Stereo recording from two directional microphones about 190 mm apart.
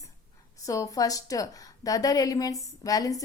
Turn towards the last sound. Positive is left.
turn(degrees=20)  # may be behind; listen again after turning